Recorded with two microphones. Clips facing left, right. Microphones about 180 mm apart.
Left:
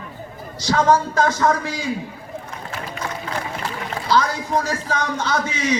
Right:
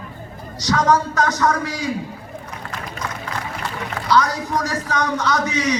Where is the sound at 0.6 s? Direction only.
30° left (ahead or behind).